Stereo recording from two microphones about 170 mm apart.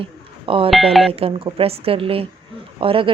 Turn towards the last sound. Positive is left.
turn(degrees=-30)  # may be behind; listen again after turning